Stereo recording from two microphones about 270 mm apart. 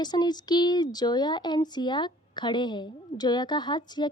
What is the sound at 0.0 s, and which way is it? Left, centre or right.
Speech, centre.